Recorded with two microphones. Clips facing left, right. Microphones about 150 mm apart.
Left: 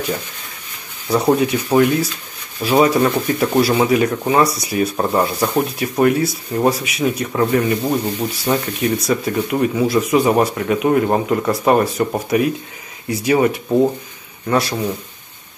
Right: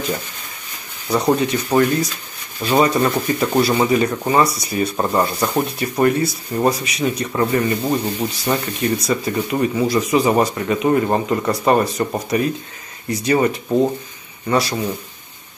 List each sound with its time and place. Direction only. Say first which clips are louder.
1.0 s speech: left 2 dB; 5° left (ahead or behind)